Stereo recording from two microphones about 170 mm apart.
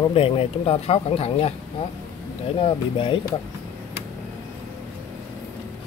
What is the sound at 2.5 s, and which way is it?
Speech, 30° left (ahead or behind).